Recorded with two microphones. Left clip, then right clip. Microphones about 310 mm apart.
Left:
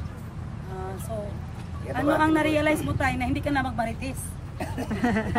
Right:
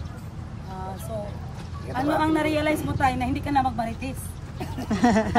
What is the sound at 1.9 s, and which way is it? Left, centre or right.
Speech, centre.